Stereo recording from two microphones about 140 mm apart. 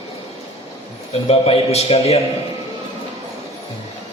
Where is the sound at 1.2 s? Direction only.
45° left (ahead or behind).